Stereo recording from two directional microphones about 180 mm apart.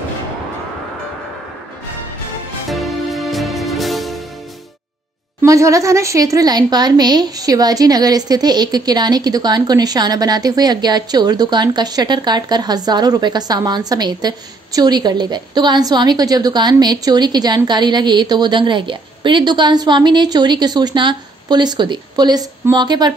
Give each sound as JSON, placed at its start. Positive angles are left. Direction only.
{"t": 2.7, "sound": "music", "side_deg": 0}
{"t": 5.4, "sound": "a woman's voice", "side_deg": -15}